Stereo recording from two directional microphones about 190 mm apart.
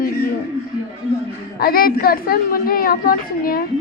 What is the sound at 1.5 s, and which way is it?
A woman's voice, 50° left (ahead or behind).